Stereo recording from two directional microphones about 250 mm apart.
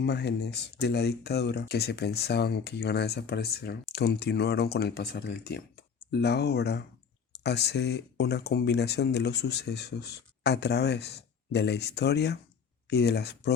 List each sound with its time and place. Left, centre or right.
0.0 s speech: left